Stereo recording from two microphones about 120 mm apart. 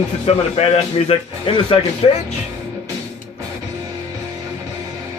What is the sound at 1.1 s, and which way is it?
Speech, 45° left (ahead or behind).